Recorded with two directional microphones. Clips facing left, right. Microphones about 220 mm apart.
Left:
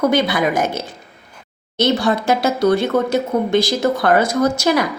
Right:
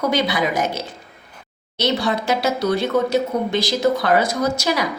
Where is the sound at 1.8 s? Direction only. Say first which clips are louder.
Left 4 dB; 50° left (ahead or behind).